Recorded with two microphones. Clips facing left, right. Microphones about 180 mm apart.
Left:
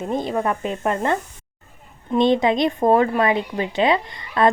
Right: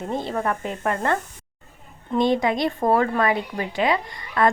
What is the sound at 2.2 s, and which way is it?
Speech, 25° left (ahead or behind).